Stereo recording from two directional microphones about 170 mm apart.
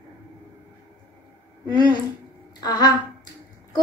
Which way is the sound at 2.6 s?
25° left (ahead or behind).